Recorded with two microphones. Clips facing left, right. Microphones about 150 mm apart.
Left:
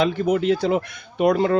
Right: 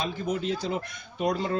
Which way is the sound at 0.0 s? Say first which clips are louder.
Left 10 dB; 75° left (ahead or behind).